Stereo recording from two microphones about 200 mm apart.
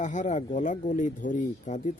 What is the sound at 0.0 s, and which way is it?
Speech, 35° left (ahead or behind).